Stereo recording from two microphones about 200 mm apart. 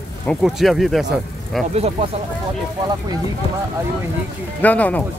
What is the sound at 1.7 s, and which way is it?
Speech, 30° right (ahead or behind).